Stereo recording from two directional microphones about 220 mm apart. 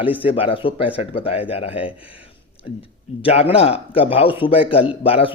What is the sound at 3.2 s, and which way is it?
Speech, 25° left (ahead or behind).